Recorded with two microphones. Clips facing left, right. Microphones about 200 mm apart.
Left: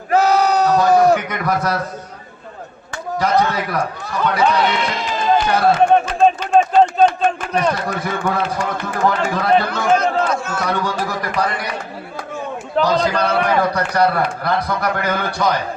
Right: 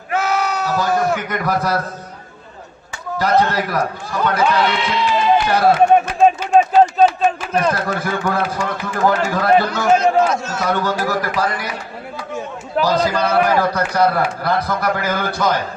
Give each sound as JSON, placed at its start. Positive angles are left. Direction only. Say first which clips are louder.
{"t": 0.1, "sound": "bleat", "louder": "left 5 dB", "side_deg": 35}
{"t": 1.2, "sound": "a man's voice", "louder": "even", "side_deg": 0}
{"t": 3.2, "sound": "a man's voice", "louder": "right 1 dB", "side_deg": 0}
{"t": 4.7, "sound": "speech", "louder": "right 3 dB", "side_deg": 45}
{"t": 5.5, "sound": "a man's voice", "louder": "right 1 dB", "side_deg": 0}
{"t": 6.1, "sound": "a sound", "louder": "right 1 dB", "side_deg": -5}
{"t": 7.5, "sound": "a man's voice", "louder": "right 1 dB", "side_deg": 0}
{"t": 10.0, "sound": "a man's voice", "louder": "right 3 dB", "side_deg": 55}
{"t": 10.6, "sound": "a man's voice", "louder": "right 2 dB", "side_deg": 0}
{"t": 12.7, "sound": "a man's voice", "louder": "even", "side_deg": 0}